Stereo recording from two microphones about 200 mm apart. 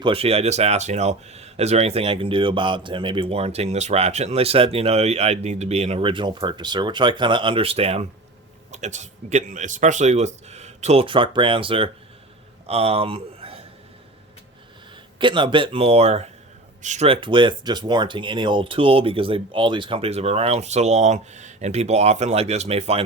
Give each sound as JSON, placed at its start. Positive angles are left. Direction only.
{"t": 0.0, "sound": "speech", "side_deg": -30}
{"t": 12.6, "sound": "a sound", "side_deg": -30}
{"t": 15.2, "sound": "speech", "side_deg": -25}